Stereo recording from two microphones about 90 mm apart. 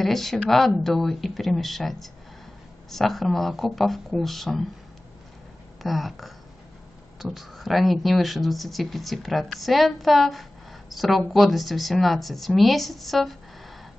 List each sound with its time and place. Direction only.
0.0 s speech: centre (ahead or behind)
5.8 s speech: centre (ahead or behind)